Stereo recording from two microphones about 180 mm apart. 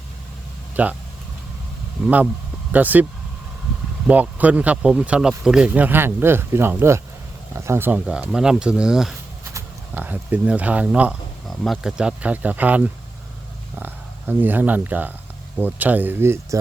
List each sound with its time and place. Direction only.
0.8 s speech: 10° right (ahead or behind)
2.7 s speech: 10° right (ahead or behind)